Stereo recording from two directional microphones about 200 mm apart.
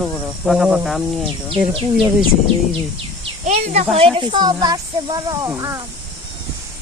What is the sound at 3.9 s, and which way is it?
Speech, 25° right (ahead or behind).